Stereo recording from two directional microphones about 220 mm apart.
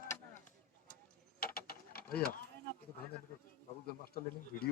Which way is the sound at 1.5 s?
40° left (ahead or behind).